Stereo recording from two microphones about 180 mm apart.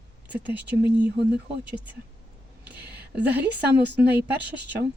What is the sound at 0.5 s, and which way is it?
Speech, 10° right (ahead or behind).